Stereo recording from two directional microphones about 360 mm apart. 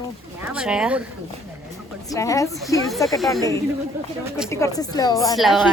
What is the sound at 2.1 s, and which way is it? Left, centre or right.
A woman's voice, centre.